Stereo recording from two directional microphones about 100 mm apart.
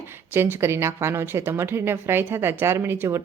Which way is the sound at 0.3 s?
25° right (ahead or behind).